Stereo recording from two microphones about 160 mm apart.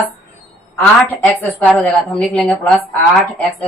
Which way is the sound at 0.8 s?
10° left (ahead or behind).